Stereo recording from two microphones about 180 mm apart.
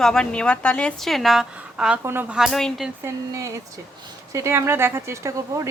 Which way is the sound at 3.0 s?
15° right (ahead or behind).